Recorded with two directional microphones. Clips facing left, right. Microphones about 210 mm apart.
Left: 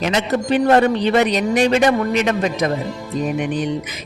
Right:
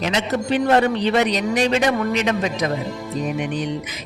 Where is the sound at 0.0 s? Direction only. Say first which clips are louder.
Left 3 dB; 55° left (ahead or behind).